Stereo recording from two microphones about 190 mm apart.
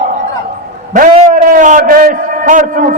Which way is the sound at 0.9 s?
45° right (ahead or behind).